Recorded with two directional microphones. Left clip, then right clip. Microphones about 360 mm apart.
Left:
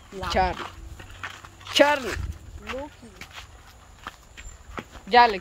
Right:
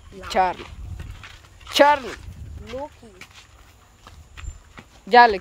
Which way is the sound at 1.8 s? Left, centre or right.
Centre.